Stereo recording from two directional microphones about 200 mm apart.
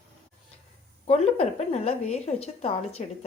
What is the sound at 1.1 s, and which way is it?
A woman's voice, 30° left (ahead or behind).